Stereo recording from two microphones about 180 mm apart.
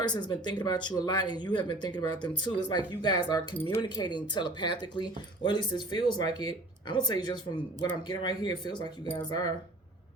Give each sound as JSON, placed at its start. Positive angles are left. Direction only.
{"t": 0.0, "sound": "speech", "side_deg": 25}
{"t": 3.8, "sound": "speech", "side_deg": 25}